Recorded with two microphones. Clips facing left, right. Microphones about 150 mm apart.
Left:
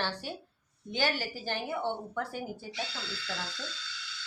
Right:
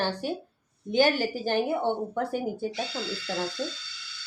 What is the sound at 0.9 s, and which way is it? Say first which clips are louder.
A woman's voice: right 9 dB; 50° right (ahead or behind).